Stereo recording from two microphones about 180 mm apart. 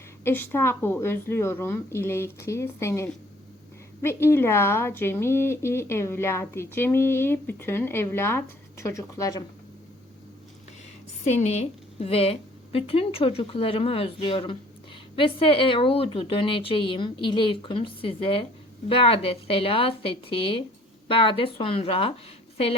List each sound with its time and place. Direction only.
0.3 s speech: 15° left (ahead or behind)
11.3 s a woman's voice: 40° left (ahead or behind)